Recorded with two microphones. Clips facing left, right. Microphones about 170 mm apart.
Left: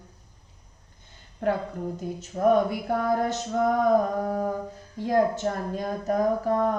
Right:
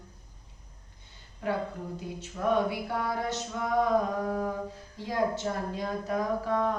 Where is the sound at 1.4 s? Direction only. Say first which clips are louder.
Left 6 dB; 55° left (ahead or behind).